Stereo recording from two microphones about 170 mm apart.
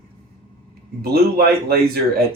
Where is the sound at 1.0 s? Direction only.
65° right (ahead or behind).